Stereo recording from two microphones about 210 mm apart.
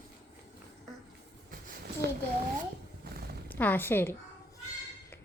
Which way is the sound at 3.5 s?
10° left (ahead or behind).